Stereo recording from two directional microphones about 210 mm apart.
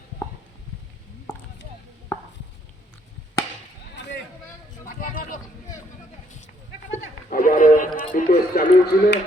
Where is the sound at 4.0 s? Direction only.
55° left (ahead or behind).